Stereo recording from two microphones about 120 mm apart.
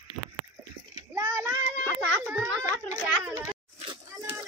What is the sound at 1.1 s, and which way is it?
Child singing, 25° right (ahead or behind).